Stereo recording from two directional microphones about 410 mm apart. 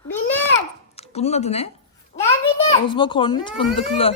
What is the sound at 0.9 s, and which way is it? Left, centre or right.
A child's voice, centre.